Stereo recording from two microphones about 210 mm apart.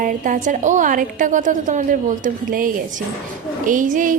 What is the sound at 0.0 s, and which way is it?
A woman's voice, 40° right (ahead or behind).